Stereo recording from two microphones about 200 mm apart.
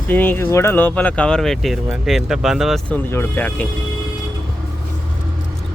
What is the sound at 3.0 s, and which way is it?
Speech, 10° left (ahead or behind).